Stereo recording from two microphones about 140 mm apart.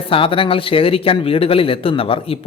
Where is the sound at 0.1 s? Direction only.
40° left (ahead or behind).